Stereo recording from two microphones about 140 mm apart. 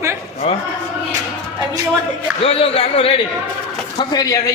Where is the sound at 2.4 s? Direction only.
45° left (ahead or behind).